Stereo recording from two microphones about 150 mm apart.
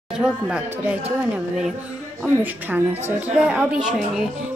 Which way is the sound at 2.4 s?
10° right (ahead or behind).